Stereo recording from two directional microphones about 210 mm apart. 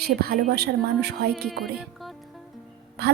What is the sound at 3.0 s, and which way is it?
Speech, 50° right (ahead or behind).